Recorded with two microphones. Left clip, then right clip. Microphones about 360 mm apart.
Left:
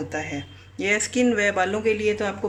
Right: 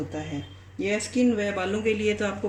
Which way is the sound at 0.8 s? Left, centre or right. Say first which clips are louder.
Left 4 dB; left.